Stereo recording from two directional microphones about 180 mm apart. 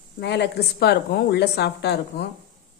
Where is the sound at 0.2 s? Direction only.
70° left (ahead or behind).